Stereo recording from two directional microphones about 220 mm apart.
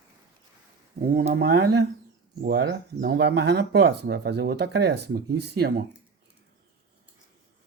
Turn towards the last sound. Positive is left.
turn(degrees=-45)  # may be behind; listen again after turning